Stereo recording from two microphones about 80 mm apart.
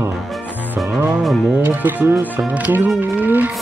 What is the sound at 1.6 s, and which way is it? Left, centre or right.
Speech, right.